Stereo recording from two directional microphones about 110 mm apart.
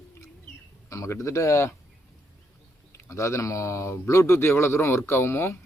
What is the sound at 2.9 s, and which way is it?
Speech, 25° left (ahead or behind).